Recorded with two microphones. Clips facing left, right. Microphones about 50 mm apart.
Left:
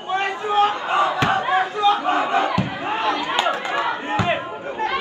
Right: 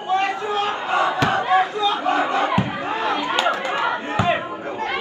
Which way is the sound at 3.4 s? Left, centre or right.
Left.